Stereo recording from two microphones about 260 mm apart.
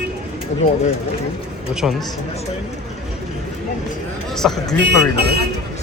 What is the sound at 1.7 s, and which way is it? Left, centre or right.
Speech, centre.